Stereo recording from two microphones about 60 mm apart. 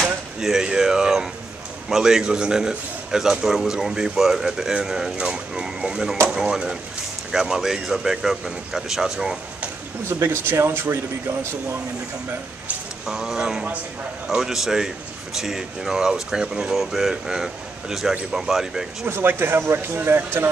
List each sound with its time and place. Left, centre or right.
0.0 s speech: centre
10.0 s speech: right
13.0 s speech: centre
19.0 s speech: right